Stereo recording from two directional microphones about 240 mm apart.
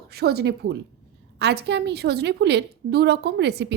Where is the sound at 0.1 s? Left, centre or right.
Right.